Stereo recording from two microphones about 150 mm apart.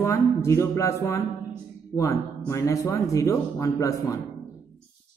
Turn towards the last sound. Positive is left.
turn(degrees=20)  # may be behind; listen again after turning